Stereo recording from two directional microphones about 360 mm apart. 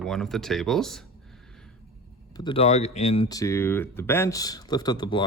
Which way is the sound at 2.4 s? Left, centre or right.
Centre.